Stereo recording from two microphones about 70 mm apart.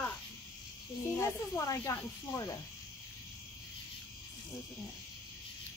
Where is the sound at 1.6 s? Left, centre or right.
Left.